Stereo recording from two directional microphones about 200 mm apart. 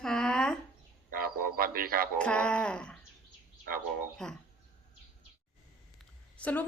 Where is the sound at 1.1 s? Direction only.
50° right (ahead or behind).